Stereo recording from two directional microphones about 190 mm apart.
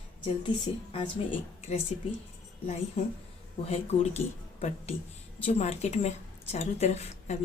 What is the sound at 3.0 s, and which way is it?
A woman's voice, 30° left (ahead or behind).